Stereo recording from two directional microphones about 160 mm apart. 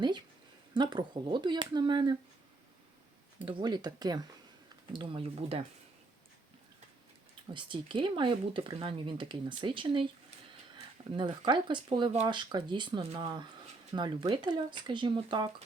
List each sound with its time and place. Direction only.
0.7 s speech: 25° right (ahead or behind)
3.4 s speech: 30° right (ahead or behind)
7.5 s speech: 30° right (ahead or behind)